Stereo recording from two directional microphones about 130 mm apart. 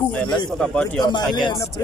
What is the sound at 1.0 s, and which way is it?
Speech, 35° left (ahead or behind).